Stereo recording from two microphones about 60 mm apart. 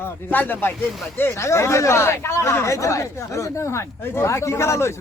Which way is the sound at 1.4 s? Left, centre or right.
Left.